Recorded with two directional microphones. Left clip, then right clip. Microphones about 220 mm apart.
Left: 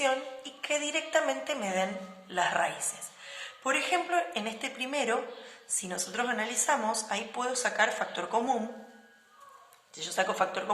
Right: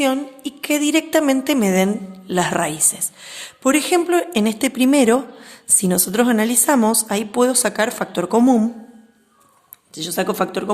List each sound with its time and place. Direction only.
0.6 s speech: 50° right (ahead or behind)
9.9 s speech: 45° right (ahead or behind)